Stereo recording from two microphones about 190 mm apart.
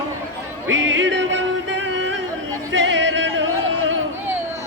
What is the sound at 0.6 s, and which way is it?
Music, 80° right.